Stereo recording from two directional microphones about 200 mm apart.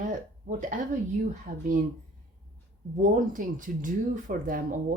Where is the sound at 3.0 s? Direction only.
40° right (ahead or behind).